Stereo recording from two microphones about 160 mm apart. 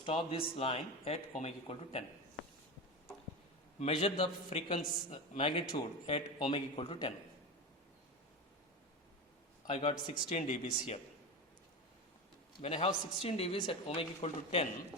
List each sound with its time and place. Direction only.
0.0 s a man's voice: 35° left (ahead or behind)
3.8 s a man's voice: 40° left (ahead or behind)
9.6 s a man's voice: 35° left (ahead or behind)
12.5 s a man's voice: 35° left (ahead or behind)